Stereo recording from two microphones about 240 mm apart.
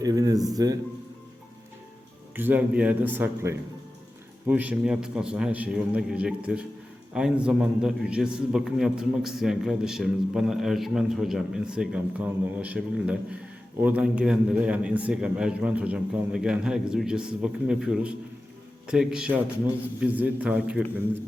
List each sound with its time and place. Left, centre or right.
0.0 s a man's voice: centre
2.3 s a man's voice: centre